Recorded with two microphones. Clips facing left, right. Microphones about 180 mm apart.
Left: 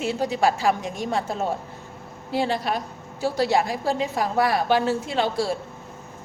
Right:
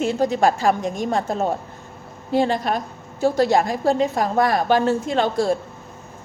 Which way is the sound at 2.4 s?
45° right (ahead or behind).